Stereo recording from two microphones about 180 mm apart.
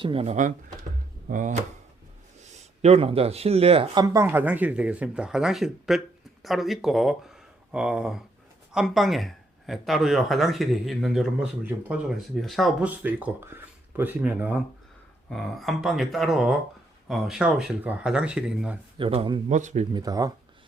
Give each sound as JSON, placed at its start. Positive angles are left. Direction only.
{"t": 0.0, "sound": "speech", "side_deg": -30}
{"t": 2.8, "sound": "speech", "side_deg": -35}
{"t": 4.0, "sound": "speech", "side_deg": -15}
{"t": 18.9, "sound": "speech", "side_deg": -30}
{"t": 19.5, "sound": "speech", "side_deg": -40}
{"t": 19.9, "sound": "speech", "side_deg": -20}